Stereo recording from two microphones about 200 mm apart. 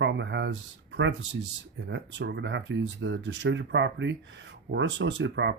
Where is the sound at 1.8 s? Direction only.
60° right (ahead or behind).